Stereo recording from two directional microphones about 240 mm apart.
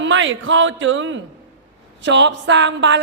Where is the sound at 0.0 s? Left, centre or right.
Right.